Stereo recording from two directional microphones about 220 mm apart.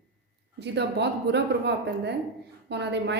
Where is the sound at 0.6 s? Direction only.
50° right (ahead or behind).